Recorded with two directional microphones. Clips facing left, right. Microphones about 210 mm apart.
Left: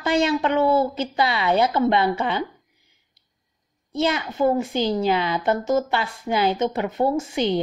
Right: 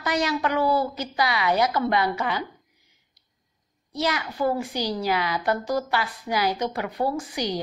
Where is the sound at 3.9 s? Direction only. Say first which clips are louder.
Left 4 dB; 25° left (ahead or behind).